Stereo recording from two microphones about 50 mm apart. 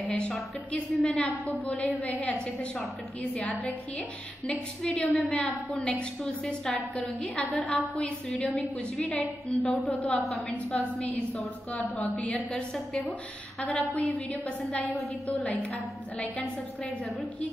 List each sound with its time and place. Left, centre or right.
1.0 s a woman's voice: centre
4.5 s a woman's voice: centre
7.2 s a woman's voice: left
8.9 s a woman's voice: centre
9.8 s a woman's voice: left
10.7 s a woman's voice: centre
12.0 s a woman's voice: left
13.6 s a woman's voice: centre
13.9 s a woman's voice: left